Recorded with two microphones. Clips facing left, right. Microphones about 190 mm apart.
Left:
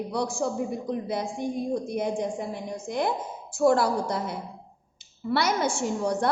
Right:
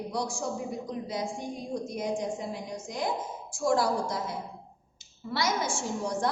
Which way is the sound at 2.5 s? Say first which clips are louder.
Left 4 dB; 60° left (ahead or behind).